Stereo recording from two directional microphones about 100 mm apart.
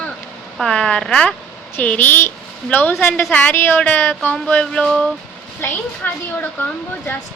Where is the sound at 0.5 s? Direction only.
5° left (ahead or behind).